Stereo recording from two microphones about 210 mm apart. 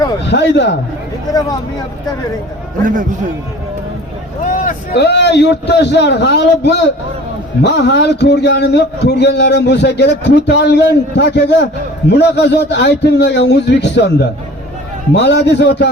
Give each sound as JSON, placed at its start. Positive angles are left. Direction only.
{"t": 0.3, "sound": "a man's voice", "side_deg": 55}
{"t": 1.3, "sound": "speech", "side_deg": 15}
{"t": 2.8, "sound": "a man's voice", "side_deg": -40}
{"t": 4.6, "sound": "a man's voice", "side_deg": 50}